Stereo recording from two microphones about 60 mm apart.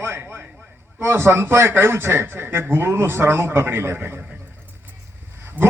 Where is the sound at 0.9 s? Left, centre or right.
Right.